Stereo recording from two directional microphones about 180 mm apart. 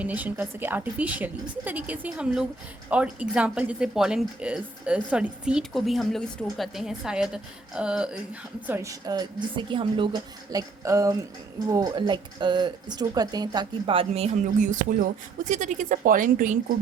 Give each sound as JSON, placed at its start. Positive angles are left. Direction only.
{"t": 0.0, "sound": "a woman's voice", "side_deg": -10}